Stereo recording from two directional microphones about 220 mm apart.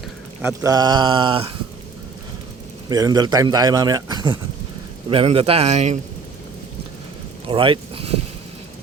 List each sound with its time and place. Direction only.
0.4 s speech: 15° right (ahead or behind)
2.9 s a man's voice: 15° right (ahead or behind)
7.4 s vehicle: 25° right (ahead or behind)